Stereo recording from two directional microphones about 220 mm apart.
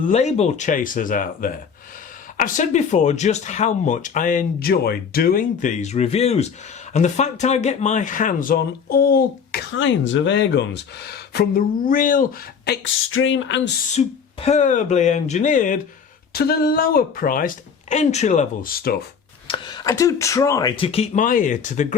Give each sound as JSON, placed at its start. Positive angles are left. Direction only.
{"t": 0.1, "sound": "speech", "side_deg": 30}
{"t": 9.7, "sound": "speech", "side_deg": 60}
{"t": 11.5, "sound": "speech", "side_deg": 40}
{"t": 13.1, "sound": "speech", "side_deg": 65}
{"t": 14.0, "sound": "speech", "side_deg": 30}
{"t": 19.5, "sound": "speech", "side_deg": 20}